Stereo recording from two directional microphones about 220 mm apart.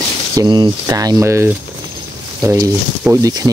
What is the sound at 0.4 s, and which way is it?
Rub, 20° right (ahead or behind).